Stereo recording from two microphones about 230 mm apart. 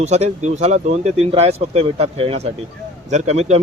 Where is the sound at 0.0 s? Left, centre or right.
Right.